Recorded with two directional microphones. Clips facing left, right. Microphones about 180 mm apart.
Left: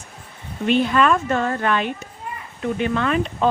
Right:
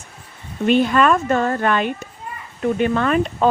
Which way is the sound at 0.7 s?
45° right (ahead or behind).